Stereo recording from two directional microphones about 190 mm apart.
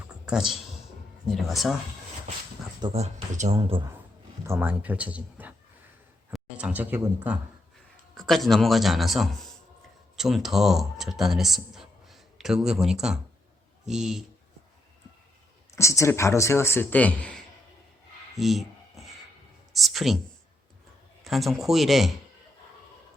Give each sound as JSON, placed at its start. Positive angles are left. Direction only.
{"t": 0.3, "sound": "speech", "side_deg": 0}
{"t": 2.8, "sound": "speech", "side_deg": -35}
{"t": 3.6, "sound": "a man's voice", "side_deg": -25}
{"t": 4.4, "sound": "speech", "side_deg": -10}
{"t": 15.7, "sound": "a man's voice", "side_deg": 15}
{"t": 18.3, "sound": "rub", "side_deg": 0}
{"t": 19.7, "sound": "a sound", "side_deg": 0}
{"t": 21.2, "sound": "speech", "side_deg": 0}